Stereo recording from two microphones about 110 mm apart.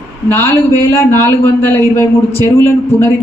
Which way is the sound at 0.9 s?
20° left (ahead or behind).